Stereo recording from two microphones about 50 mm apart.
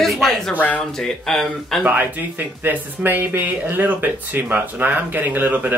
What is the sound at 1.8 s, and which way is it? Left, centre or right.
Speech, right.